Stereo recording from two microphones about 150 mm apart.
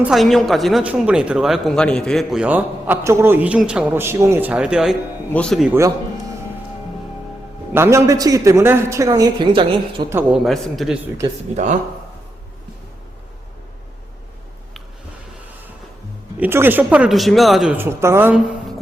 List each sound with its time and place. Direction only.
0.0 s speech: centre (ahead or behind)
2.4 s a man's voice: 10° right (ahead or behind); by 5.6 s 5° left (ahead or behind)
5.6 s a man's voice: 15° right (ahead or behind)
7.7 s a man's voice: 20° right (ahead or behind); by 10.1 s 35° right (ahead or behind)
10.4 s speech: centre (ahead or behind)
11.5 s speech: 50° right (ahead or behind)
16.4 s a man's voice: 15° right (ahead or behind)
17.7 s a man's voice: 20° right (ahead or behind)